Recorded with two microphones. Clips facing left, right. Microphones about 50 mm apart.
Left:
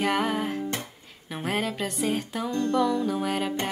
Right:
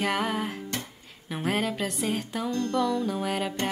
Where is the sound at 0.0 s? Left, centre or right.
Centre.